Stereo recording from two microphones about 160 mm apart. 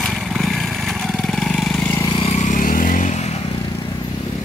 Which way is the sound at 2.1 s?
40° left (ahead or behind).